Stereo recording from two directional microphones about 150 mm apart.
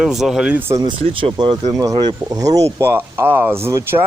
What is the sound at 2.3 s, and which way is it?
Speech, 25° right (ahead or behind).